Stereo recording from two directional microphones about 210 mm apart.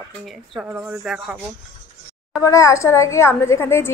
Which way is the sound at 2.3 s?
15° left (ahead or behind).